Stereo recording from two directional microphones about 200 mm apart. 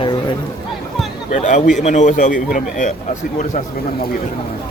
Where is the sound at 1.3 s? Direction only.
40° left (ahead or behind).